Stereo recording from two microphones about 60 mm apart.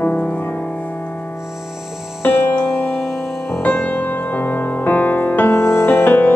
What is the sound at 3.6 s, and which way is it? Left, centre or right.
Music, left.